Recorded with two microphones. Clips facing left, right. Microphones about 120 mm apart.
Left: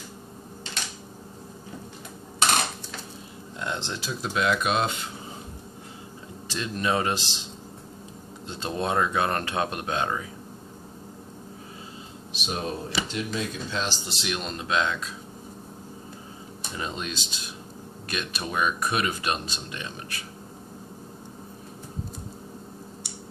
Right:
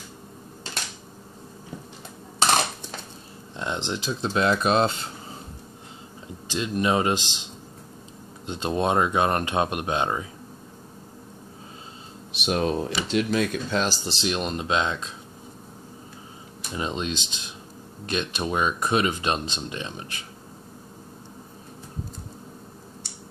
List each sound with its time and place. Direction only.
3.5 s speech: 20° right (ahead or behind)
6.5 s speech: 20° right (ahead or behind)
8.5 s speech: 20° right (ahead or behind)
12.3 s a sound: 70° right (ahead or behind)
13.1 s speech: 65° right (ahead or behind); by 13.9 s 50° right (ahead or behind)
14.0 s speech: 30° right (ahead or behind)
16.7 s speech: 20° right (ahead or behind)